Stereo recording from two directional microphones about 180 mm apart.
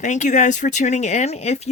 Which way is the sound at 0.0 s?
40° left (ahead or behind).